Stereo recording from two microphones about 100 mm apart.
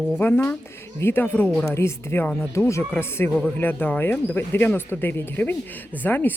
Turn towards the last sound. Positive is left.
turn(degrees=20)  # may be behind; listen again after turning